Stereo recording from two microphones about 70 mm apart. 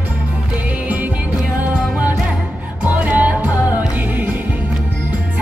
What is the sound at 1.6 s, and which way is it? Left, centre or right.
Music, right.